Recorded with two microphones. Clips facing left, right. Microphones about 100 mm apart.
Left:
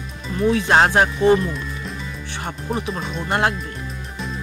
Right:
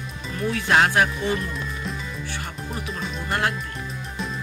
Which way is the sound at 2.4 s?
35° left (ahead or behind).